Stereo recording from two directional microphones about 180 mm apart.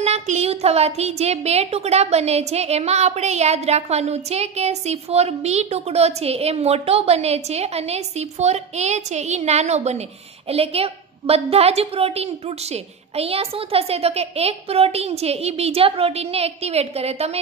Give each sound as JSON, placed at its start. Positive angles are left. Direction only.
{"t": 0.0, "sound": "a woman's voice", "side_deg": -35}